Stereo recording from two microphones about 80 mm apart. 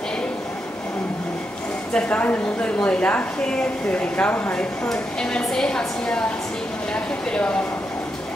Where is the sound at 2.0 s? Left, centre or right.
Centre.